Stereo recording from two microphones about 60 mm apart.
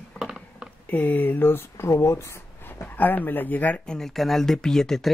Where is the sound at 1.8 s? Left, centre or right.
Left.